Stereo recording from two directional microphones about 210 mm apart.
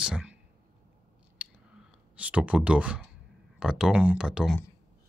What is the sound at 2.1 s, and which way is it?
Speech, 5° right (ahead or behind).